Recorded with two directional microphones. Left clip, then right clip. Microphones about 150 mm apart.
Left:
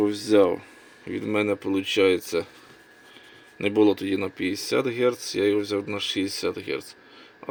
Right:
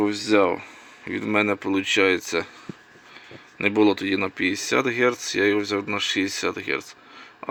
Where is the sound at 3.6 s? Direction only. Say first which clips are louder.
Right 1 dB; 5° left (ahead or behind).